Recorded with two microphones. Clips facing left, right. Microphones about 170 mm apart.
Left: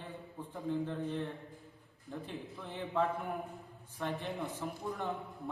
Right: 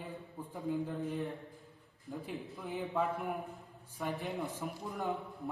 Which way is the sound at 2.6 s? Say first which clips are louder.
Left 1 dB; centre (ahead or behind).